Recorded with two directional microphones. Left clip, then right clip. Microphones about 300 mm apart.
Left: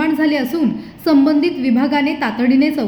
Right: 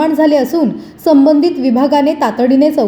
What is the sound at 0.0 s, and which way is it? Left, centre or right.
A woman's voice, centre.